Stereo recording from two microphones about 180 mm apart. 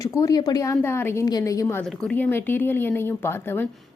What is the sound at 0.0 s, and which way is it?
A woman's voice, 20° left (ahead or behind).